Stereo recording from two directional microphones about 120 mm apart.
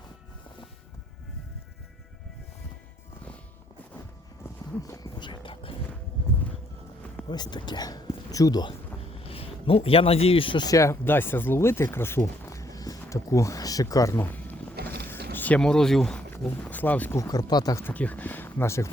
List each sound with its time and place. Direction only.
4.8 s a sound: 35° left (ahead or behind)
7.3 s speech: 35° left (ahead or behind)
9.2 s speech: 50° left (ahead or behind)
10.7 s speech: 25° left (ahead or behind)
17.2 s speech: 30° left (ahead or behind)
17.8 s speech: 15° left (ahead or behind)